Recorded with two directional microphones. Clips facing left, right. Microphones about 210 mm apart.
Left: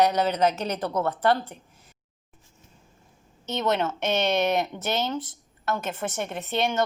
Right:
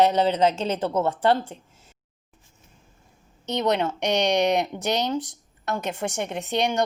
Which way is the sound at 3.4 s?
15° right (ahead or behind).